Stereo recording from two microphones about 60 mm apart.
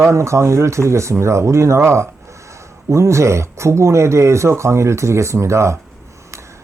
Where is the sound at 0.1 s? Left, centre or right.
Right.